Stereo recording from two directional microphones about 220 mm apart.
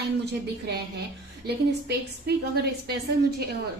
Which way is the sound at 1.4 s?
50° right (ahead or behind).